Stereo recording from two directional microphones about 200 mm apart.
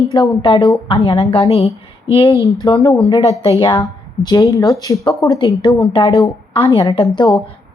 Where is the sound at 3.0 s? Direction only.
25° left (ahead or behind).